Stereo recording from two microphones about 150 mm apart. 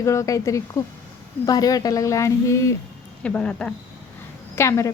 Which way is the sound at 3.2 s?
10° left (ahead or behind).